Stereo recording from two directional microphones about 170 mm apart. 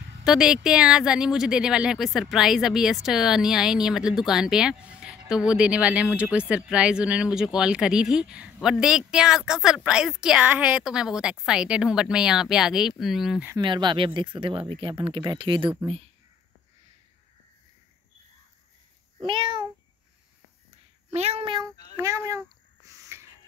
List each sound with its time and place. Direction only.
0.2 s speech: 5° right (ahead or behind)
13.6 s speech: 25° right (ahead or behind)
19.1 s speech: 30° right (ahead or behind)
21.1 s speech: 40° right (ahead or behind)
21.9 s speech: 15° right (ahead or behind)
22.8 s a sound: 20° right (ahead or behind)